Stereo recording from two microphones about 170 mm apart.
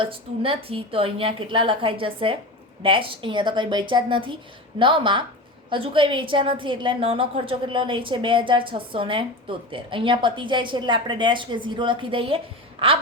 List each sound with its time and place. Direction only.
0.0 s a woman's voice: 30° right (ahead or behind)